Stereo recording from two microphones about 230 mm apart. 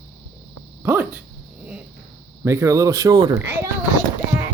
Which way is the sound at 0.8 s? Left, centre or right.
Centre.